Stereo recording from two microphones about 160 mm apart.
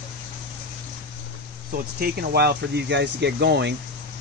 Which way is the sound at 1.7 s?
75° right (ahead or behind).